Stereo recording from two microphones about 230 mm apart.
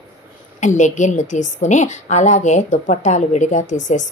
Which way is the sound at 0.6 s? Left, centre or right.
Left.